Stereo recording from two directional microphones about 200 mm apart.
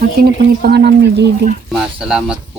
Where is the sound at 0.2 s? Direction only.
50° right (ahead or behind).